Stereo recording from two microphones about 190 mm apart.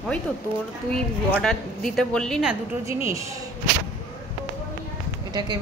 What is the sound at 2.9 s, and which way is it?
Speech, 15° right (ahead or behind).